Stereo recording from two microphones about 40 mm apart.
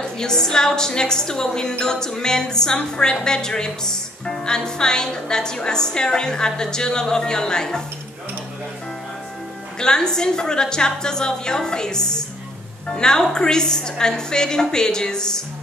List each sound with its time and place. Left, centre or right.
0.2 s a woman's voice: centre
9.8 s a woman's voice: centre